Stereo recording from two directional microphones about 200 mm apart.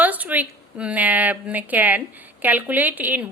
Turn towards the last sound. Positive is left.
turn(degrees=-10)  # may be behind; listen again after turning